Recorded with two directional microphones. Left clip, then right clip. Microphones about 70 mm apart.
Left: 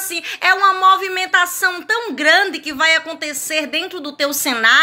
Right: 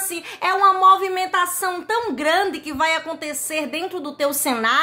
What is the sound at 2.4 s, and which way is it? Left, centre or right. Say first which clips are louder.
A woman's voice: left 5 dB; right.